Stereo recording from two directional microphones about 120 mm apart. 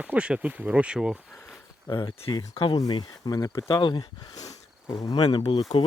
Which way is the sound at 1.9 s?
40° left (ahead or behind).